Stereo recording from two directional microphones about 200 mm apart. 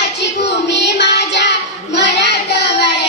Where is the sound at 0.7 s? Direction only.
60° left (ahead or behind).